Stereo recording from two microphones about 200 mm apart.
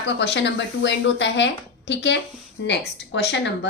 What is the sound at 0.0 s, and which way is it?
Speech, 60° left (ahead or behind).